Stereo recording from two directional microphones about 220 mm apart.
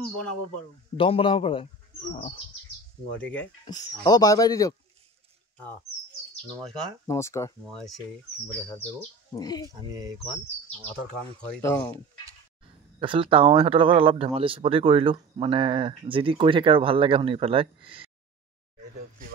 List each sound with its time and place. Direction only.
0.9 s a man's voice: 25° left (ahead or behind)
3.2 s speech: 5° left (ahead or behind)
3.6 s speech: 15° left (ahead or behind)
7.1 s speech: 15° left (ahead or behind)
9.3 s speech: 15° left (ahead or behind)
11.4 s speech: 10° left (ahead or behind)
13.0 s speech: 25° right (ahead or behind)